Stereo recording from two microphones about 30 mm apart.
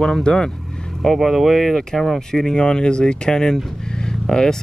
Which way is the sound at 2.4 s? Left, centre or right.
Left.